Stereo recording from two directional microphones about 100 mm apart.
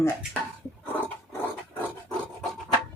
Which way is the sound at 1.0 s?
20° left (ahead or behind).